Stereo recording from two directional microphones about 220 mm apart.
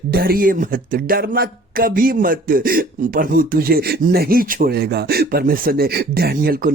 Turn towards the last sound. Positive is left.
turn(degrees=-40)  # may be behind; listen again after turning